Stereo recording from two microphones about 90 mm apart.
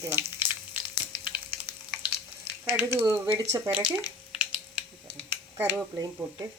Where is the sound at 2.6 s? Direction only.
25° right (ahead or behind).